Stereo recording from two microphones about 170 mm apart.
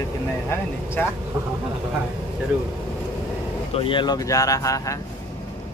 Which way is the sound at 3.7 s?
30° left (ahead or behind).